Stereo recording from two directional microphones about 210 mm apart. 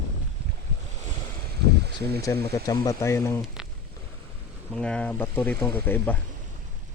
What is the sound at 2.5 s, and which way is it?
Speech, 15° left (ahead or behind).